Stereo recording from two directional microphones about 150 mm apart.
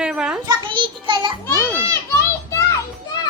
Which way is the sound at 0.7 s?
35° right (ahead or behind).